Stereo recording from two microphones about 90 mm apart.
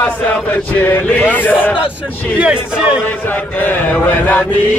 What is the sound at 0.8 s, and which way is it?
Mantra, 20° left (ahead or behind).